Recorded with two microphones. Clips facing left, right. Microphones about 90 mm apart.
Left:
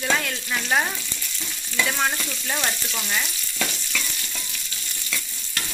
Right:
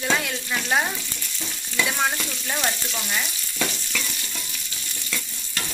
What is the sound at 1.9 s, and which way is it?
Stir, 5° right (ahead or behind).